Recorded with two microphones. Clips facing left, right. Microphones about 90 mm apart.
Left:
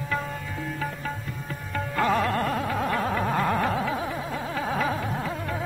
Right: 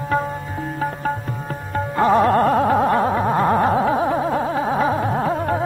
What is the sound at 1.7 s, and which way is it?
Music, 30° right (ahead or behind).